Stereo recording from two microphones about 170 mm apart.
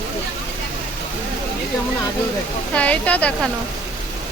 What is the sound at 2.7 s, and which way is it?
Speech, 10° left (ahead or behind).